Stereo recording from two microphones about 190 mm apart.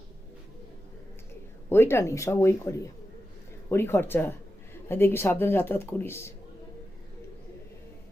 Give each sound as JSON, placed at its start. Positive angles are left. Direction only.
{"t": 1.7, "sound": "speech", "side_deg": 10}